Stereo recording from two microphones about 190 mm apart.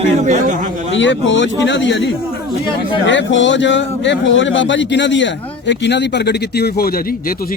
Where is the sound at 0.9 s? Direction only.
75° left (ahead or behind).